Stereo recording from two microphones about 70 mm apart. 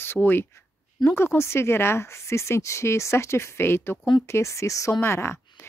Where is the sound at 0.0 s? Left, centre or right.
Left.